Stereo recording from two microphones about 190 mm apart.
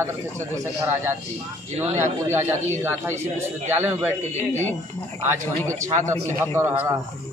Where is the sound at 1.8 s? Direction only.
15° right (ahead or behind).